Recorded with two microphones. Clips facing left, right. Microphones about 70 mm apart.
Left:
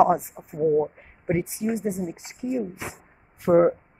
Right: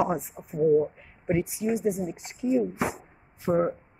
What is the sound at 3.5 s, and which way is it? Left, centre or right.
Speech, left.